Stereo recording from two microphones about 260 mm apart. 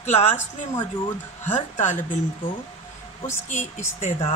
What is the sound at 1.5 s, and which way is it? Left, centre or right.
Speech, left.